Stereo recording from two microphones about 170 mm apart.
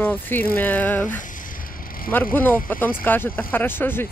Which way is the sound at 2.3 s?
10° left (ahead or behind).